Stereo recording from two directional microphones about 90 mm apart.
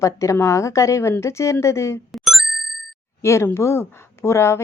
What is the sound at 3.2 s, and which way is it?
A woman's voice, 30° left (ahead or behind).